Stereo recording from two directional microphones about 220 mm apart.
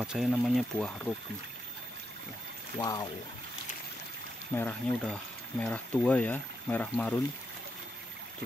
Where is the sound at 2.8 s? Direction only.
15° left (ahead or behind).